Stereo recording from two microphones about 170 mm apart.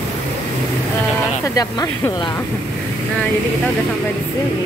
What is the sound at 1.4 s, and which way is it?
Speech, 20° left (ahead or behind).